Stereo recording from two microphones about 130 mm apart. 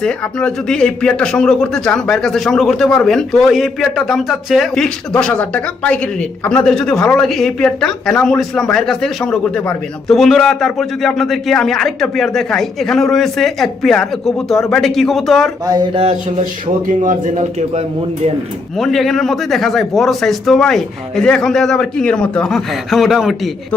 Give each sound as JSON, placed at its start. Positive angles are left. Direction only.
{"t": 0.0, "sound": "speech", "side_deg": 5}
{"t": 15.6, "sound": "speech", "side_deg": -30}
{"t": 17.0, "sound": "a man's voice", "side_deg": -80}
{"t": 18.8, "sound": "speech", "side_deg": 0}